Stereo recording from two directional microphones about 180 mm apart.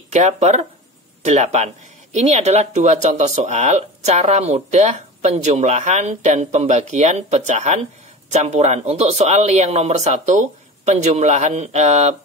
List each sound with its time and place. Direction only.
0.1 s speech: 40° right (ahead or behind)